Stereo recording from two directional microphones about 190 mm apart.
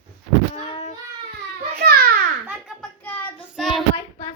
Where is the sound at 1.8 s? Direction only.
55° right (ahead or behind).